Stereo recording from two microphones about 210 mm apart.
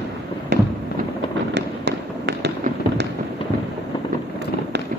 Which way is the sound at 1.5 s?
55° right (ahead or behind).